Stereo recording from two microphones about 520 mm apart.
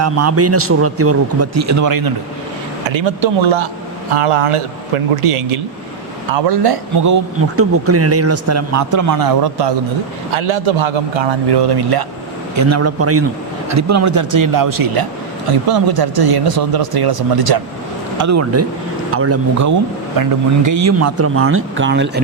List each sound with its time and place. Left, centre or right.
0.0 s a man's voice: right
2.8 s a man's voice: right
4.1 s a man's voice: right
6.3 s speech: right
10.3 s a man's voice: right
12.5 s a man's voice: right
18.2 s a man's voice: right